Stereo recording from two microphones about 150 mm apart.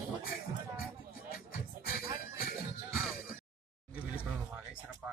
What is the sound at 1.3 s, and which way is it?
Music, 75° left (ahead or behind).